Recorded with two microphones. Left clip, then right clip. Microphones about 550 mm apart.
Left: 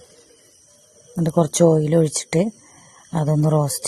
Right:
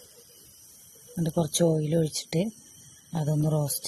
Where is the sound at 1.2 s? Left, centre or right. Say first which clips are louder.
Left 9 dB; right.